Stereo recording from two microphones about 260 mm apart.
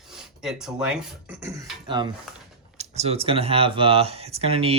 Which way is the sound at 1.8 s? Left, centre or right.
Centre.